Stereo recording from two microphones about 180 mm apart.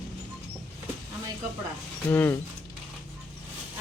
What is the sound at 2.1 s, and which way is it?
Speech, 10° left (ahead or behind).